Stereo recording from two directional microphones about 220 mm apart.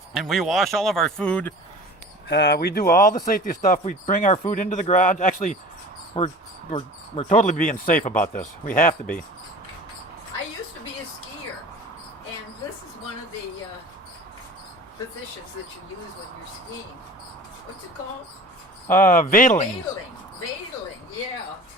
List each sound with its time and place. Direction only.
0.1 s speech: centre (ahead or behind)
2.2 s speech: 50° left (ahead or behind)
18.9 s speech: 40° left (ahead or behind)